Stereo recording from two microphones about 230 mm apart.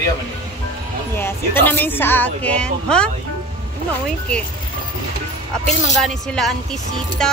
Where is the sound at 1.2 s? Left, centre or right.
Centre.